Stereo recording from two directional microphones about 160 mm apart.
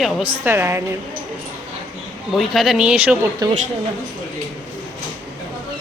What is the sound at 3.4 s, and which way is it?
Speech, 25° right (ahead or behind).